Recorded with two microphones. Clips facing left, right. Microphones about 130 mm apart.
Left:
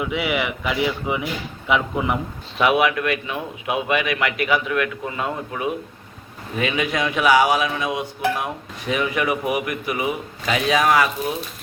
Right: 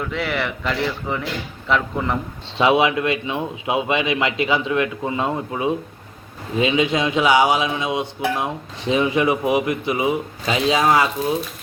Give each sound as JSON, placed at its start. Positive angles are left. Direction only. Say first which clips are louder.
{"t": 0.0, "sound": "speech", "louder": "left 1 dB", "side_deg": 10}
{"t": 2.6, "sound": "speech", "louder": "right 2 dB", "side_deg": -25}